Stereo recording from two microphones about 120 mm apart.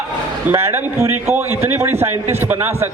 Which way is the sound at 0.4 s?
20° right (ahead or behind).